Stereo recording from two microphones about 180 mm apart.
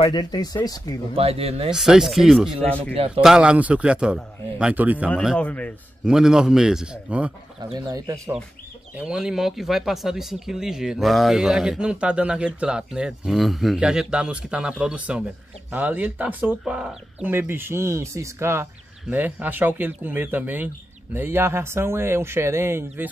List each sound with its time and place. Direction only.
0.0 s speech: 25° left (ahead or behind)
1.1 s speech: 35° right (ahead or behind)
1.7 s speech: 5° right (ahead or behind)
2.8 s speech: 35° right (ahead or behind)
3.2 s speech: 5° right (ahead or behind)
6.0 s speech: 5° right (ahead or behind)
7.7 s speech: 20° right (ahead or behind)
8.9 s speech: 5° right (ahead or behind)